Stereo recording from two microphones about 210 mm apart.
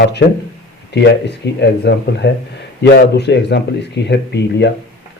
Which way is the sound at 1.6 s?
55° left (ahead or behind).